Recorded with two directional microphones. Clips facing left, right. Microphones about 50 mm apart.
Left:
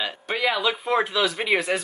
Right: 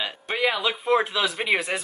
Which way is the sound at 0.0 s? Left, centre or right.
Centre.